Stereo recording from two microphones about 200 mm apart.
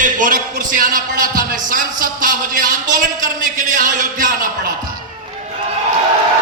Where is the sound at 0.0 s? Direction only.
40° right (ahead or behind).